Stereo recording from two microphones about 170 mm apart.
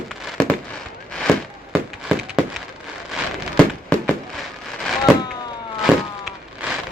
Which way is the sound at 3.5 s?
5° left (ahead or behind).